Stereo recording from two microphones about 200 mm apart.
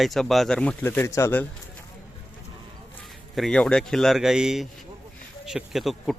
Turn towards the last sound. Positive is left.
turn(degrees=0)  # may be behind; listen again after turning